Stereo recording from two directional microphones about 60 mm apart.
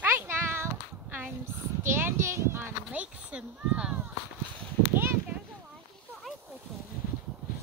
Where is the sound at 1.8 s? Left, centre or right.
Right.